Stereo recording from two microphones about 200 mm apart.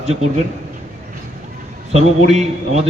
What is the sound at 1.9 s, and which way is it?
Speech, 35° right (ahead or behind).